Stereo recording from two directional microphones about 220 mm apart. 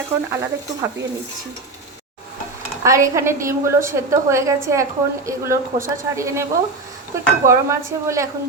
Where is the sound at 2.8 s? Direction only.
15° right (ahead or behind).